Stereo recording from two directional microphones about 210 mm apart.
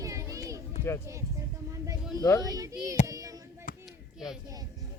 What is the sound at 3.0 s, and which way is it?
Child singing, 15° right (ahead or behind).